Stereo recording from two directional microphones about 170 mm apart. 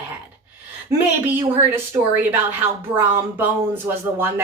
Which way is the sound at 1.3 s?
10° right (ahead or behind).